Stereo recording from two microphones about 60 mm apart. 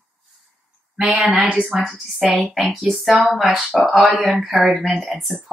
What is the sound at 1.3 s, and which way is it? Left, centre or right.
Speech, right.